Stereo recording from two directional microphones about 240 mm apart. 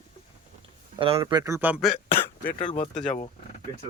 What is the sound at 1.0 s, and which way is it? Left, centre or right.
Speech, right.